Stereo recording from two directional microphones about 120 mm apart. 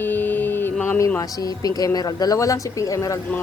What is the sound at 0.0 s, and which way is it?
Music, 15° left (ahead or behind).